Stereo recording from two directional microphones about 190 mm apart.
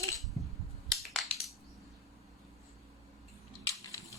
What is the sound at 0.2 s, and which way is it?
Crushing, centre (ahead or behind).